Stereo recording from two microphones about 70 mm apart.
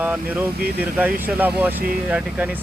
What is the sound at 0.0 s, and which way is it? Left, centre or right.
Speech, right.